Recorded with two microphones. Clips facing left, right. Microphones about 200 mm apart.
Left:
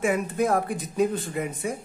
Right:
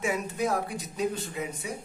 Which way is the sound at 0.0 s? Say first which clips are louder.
Left 5 dB; 55° left (ahead or behind).